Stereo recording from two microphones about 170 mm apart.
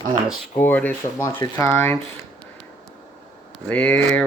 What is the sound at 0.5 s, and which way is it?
Speech, 10° left (ahead or behind).